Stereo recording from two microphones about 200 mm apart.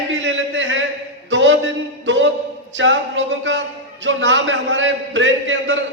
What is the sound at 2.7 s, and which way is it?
A man's voice, 70° right (ahead or behind).